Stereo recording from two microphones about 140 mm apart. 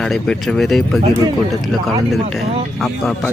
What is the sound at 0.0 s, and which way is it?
A man's voice, centre (ahead or behind).